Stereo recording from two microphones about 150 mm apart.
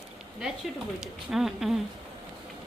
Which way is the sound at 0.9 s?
5° right (ahead or behind).